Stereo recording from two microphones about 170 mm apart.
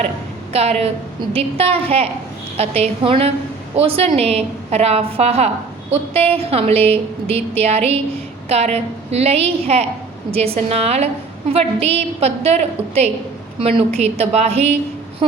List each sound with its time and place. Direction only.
0.5 s a woman's voice: 35° right (ahead or behind)